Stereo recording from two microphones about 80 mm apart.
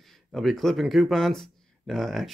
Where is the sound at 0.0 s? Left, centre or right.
Centre.